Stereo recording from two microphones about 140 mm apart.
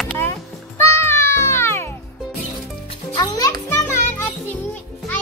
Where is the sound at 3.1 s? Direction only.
30° left (ahead or behind).